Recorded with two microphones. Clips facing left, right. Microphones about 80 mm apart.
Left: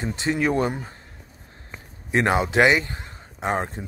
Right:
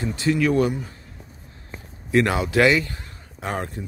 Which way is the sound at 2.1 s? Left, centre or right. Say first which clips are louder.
Even; left.